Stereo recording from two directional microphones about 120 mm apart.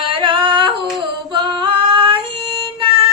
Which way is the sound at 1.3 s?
45° right (ahead or behind).